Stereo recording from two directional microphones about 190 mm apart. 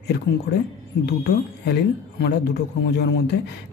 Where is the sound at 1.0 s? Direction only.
60° left (ahead or behind).